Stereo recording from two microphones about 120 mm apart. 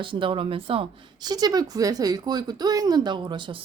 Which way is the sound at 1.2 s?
35° right (ahead or behind).